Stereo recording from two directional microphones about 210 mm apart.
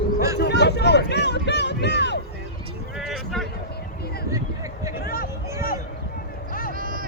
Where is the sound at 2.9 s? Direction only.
Centre (ahead or behind).